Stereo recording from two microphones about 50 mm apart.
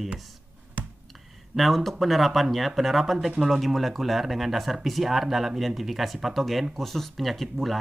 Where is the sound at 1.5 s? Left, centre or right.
Centre.